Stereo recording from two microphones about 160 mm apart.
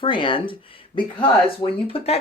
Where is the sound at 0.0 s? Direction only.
30° left (ahead or behind).